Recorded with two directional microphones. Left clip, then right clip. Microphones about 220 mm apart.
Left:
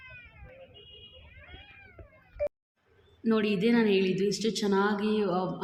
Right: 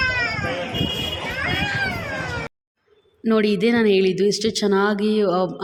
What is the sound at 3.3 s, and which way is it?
A woman's voice, 40° right (ahead or behind).